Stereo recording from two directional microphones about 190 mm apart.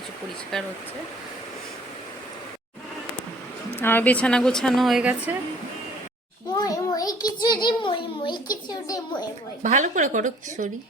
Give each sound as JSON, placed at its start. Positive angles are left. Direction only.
{"t": 0.5, "sound": "a woman's voice", "side_deg": 0}
{"t": 3.8, "sound": "a woman's voice", "side_deg": 10}
{"t": 6.5, "sound": "child singing", "side_deg": 20}
{"t": 9.6, "sound": "speech", "side_deg": -40}